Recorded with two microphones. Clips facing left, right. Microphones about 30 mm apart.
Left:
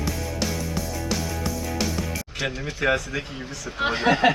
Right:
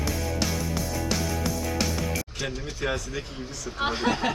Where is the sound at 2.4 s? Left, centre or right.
Left.